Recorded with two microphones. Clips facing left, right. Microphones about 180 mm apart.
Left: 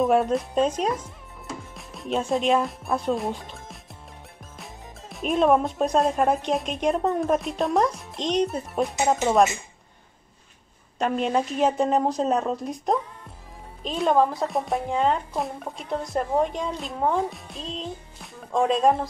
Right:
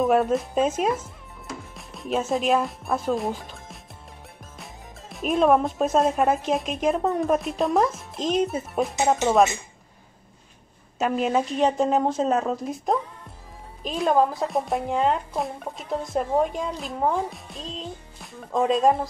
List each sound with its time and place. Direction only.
0.0 s speech: centre (ahead or behind)
5.1 s speech: centre (ahead or behind)
11.0 s speech: 5° right (ahead or behind)